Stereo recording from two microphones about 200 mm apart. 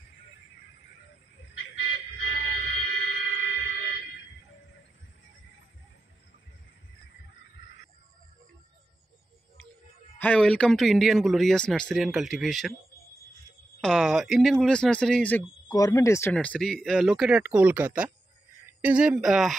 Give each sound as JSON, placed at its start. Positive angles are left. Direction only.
{"t": 1.5, "sound": "music", "side_deg": 75}
{"t": 3.3, "sound": "a sound", "side_deg": 65}
{"t": 10.1, "sound": "speech", "side_deg": 5}
{"t": 13.7, "sound": "speech", "side_deg": 0}
{"t": 15.7, "sound": "speech", "side_deg": 15}